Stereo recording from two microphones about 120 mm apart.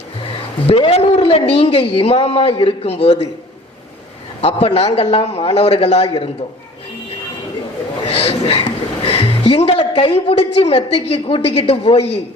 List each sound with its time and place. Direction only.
0.7 s a man's voice: 55° left (ahead or behind)
4.4 s a man's voice: 60° left (ahead or behind)
8.0 s music: 55° left (ahead or behind)
10.0 s a man's voice: 50° left (ahead or behind)